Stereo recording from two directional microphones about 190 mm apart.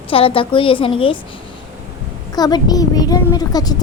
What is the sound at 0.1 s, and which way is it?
Speech, 30° left (ahead or behind).